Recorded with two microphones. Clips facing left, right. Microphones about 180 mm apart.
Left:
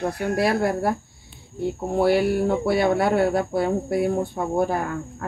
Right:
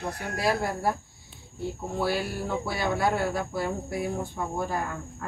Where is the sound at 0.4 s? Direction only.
65° left (ahead or behind).